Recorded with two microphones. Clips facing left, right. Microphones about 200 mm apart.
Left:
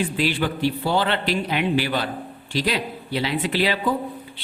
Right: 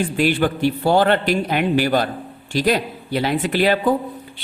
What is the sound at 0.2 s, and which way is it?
Speech, 50° right (ahead or behind).